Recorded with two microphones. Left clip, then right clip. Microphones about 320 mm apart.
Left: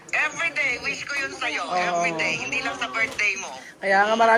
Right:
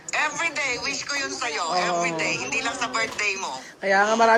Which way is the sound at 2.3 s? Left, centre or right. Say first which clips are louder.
Even; right.